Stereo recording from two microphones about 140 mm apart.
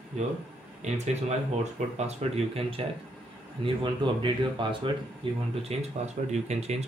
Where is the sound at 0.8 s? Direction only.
55° right (ahead or behind).